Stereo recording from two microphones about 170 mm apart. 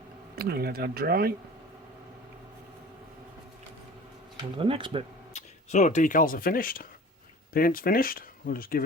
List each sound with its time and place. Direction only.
0.3 s speech: 65° right (ahead or behind)
4.5 s speech: 30° right (ahead or behind)
5.3 s speech: 45° left (ahead or behind)